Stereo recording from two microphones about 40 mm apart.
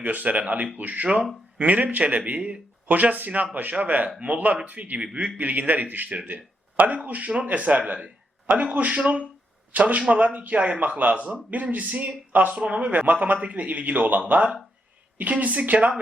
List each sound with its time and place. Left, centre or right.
0.0 s speech: right
2.9 s speech: right